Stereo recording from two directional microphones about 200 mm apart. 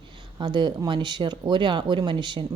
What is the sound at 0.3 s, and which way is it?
Speech, 20° right (ahead or behind).